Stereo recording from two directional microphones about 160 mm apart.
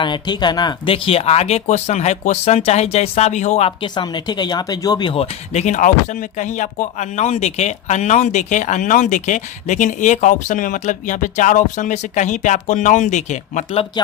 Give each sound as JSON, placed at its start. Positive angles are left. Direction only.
{"t": 0.0, "sound": "speech", "side_deg": 30}
{"t": 3.9, "sound": "speech", "side_deg": 25}